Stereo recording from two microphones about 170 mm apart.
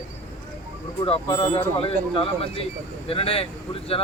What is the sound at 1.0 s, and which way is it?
Speech, 35° left (ahead or behind).